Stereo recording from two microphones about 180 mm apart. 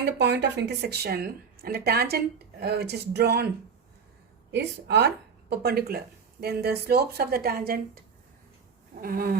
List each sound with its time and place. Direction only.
0.0 s a woman's voice: 75° right (ahead or behind)
4.5 s a woman's voice: 70° right (ahead or behind)
9.0 s a woman's voice: 55° right (ahead or behind)